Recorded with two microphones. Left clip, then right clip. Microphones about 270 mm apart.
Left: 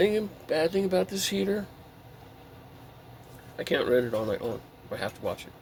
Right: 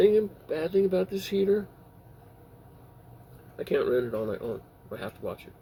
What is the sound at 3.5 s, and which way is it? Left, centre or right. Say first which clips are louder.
Speech: left 1 dB; left.